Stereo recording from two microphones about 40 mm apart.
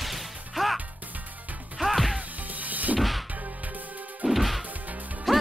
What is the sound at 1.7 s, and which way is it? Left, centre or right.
Music, centre.